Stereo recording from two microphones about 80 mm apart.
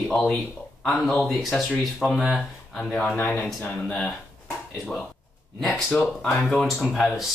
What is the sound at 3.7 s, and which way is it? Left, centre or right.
Speech, centre.